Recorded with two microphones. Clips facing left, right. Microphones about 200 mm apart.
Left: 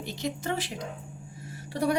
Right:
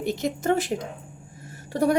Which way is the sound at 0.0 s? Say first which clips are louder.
Right 7 dB; 50° right (ahead or behind).